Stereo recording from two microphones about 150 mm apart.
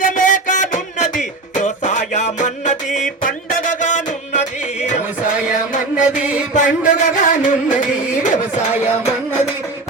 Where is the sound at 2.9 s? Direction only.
60° left (ahead or behind).